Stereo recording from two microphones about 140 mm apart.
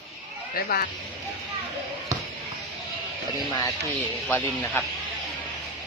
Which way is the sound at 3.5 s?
25° left (ahead or behind).